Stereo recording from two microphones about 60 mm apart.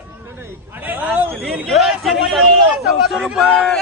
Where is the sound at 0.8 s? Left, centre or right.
Right.